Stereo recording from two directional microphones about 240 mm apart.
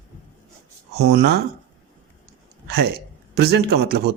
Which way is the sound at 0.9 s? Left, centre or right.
Right.